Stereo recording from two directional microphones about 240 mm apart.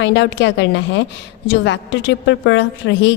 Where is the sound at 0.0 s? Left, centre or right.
Left.